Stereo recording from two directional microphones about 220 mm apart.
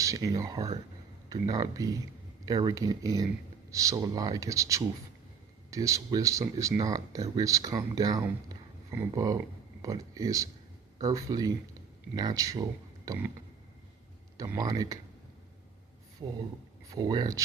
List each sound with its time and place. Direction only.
0.0 s speech: 15° right (ahead or behind)
14.3 s speech: 15° right (ahead or behind)
16.2 s speech: 20° right (ahead or behind)